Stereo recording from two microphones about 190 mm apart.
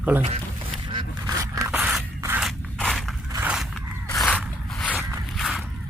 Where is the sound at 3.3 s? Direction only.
10° right (ahead or behind).